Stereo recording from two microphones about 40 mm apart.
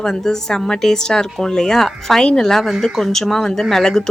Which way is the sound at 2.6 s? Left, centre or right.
Centre.